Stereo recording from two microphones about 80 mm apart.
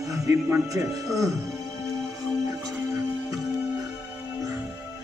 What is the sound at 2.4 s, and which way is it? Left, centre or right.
Music, right.